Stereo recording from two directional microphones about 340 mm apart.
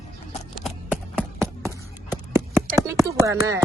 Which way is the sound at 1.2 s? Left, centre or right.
Centre.